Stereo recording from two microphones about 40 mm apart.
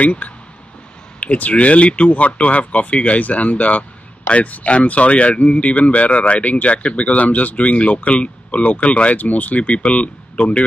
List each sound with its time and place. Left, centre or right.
0.0 s speech: left
10.4 s a man's voice: left